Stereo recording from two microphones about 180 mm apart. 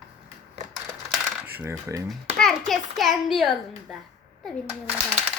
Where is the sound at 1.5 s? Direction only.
15° right (ahead or behind).